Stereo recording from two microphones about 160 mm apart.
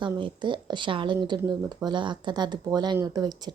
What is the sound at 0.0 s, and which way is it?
Speech, 30° right (ahead or behind).